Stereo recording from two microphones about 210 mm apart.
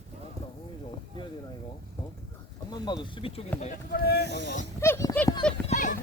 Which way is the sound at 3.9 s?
50° left (ahead or behind).